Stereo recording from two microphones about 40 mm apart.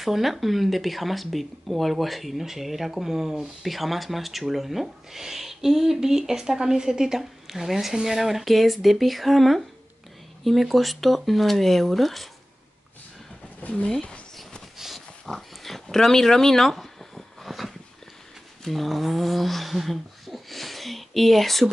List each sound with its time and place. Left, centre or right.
0.0 s speech: centre
13.6 s speech: left
15.0 s a sound: centre
18.6 s speech: centre